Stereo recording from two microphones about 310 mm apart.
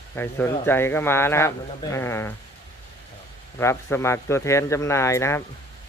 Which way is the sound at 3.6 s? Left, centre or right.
Centre.